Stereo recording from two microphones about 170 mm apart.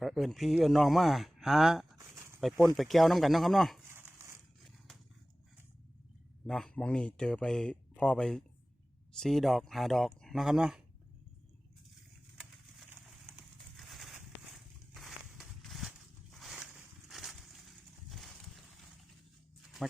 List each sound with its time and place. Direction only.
0.0 s speech: centre (ahead or behind)
2.0 s a sound: 15° right (ahead or behind)
2.4 s speech: centre (ahead or behind)
3.8 s crumpling: 15° right (ahead or behind)
6.5 s speech: 5° left (ahead or behind)
13.7 s a sound: centre (ahead or behind)